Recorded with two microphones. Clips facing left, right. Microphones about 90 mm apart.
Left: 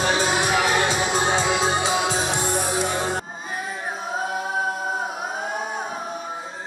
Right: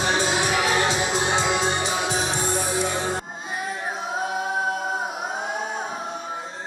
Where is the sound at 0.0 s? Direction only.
45° left (ahead or behind).